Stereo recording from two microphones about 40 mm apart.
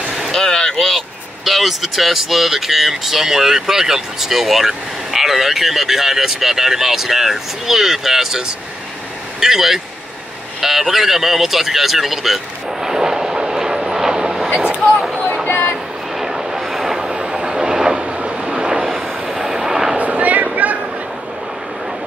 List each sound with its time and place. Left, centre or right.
0.3 s a sound: centre
0.7 s vehicle: centre
1.4 s speech: centre
12.8 s vehicle: centre
15.4 s a sound: left
16.2 s vehicle: centre
17.1 s train: right
18.0 s vehicle: right
20.0 s a sound: right